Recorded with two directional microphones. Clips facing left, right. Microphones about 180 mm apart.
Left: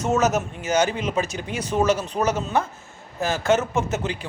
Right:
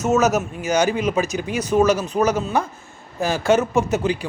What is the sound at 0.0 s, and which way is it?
Speech, 10° right (ahead or behind).